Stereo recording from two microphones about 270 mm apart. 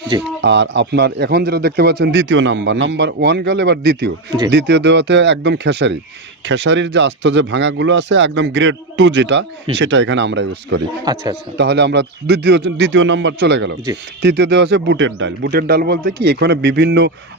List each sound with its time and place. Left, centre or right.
0.4 s a man's voice: right
11.1 s a man's voice: centre
11.5 s a man's voice: right